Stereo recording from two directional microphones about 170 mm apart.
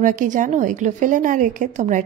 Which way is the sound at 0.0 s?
50° right (ahead or behind).